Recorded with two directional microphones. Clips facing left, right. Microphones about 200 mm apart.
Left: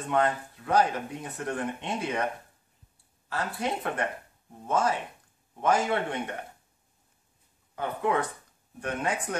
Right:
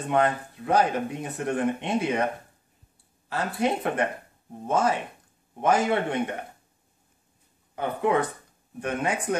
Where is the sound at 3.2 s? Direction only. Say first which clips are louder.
Right 5 dB; 20° right (ahead or behind).